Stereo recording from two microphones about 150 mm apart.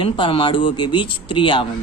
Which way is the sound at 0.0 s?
35° left (ahead or behind).